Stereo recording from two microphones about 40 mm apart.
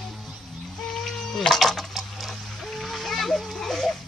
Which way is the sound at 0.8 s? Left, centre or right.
Centre.